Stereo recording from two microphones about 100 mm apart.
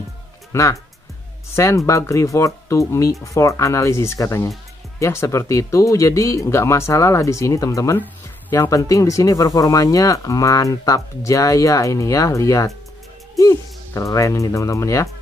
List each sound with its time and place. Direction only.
0.5 s speech: 30° left (ahead or behind)